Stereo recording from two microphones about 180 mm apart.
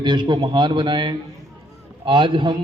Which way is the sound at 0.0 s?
25° right (ahead or behind).